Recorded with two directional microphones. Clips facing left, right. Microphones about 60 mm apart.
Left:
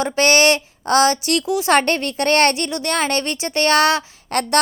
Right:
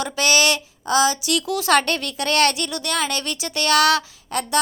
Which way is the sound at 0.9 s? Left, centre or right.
Left.